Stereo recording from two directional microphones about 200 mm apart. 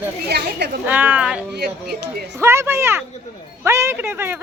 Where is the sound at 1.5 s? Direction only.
55° right (ahead or behind).